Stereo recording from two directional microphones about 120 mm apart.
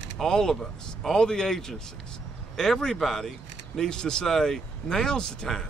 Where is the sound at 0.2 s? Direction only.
5° left (ahead or behind).